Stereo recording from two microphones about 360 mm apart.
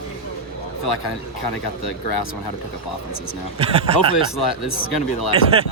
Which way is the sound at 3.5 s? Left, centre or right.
Centre.